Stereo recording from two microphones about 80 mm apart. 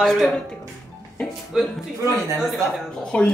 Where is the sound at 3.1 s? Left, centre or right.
Centre.